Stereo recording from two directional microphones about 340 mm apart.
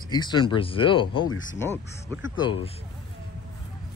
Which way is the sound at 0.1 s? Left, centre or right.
Centre.